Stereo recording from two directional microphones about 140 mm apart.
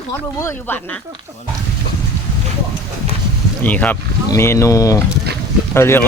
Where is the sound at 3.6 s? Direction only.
10° left (ahead or behind).